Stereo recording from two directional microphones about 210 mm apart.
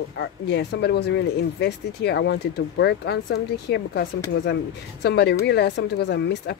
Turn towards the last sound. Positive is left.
turn(degrees=55)  # may be behind; listen again after turning